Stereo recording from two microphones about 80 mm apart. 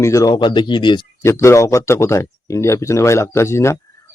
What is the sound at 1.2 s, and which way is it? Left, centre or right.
Speech, left.